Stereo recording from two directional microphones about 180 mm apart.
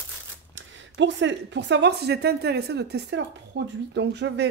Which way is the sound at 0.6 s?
90° right.